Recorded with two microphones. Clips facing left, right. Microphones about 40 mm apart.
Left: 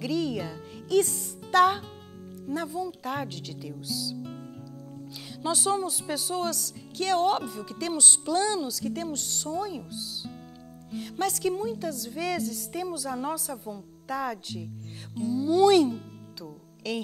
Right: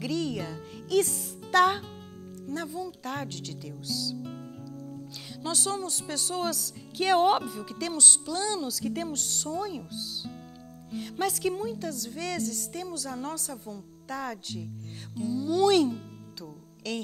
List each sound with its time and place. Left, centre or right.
0.0 s speech: centre
7.0 s speech: centre
7.4 s speech: centre
7.9 s speech: centre
8.6 s speech: centre